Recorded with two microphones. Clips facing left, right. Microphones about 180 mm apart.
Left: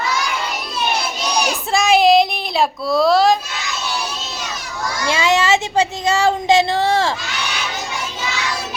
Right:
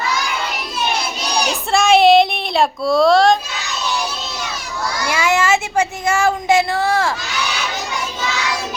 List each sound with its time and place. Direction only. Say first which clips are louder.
1.7 s child singing: right 2 dB; centre (ahead or behind)
5.0 s child singing: left 1 dB; 20° left (ahead or behind)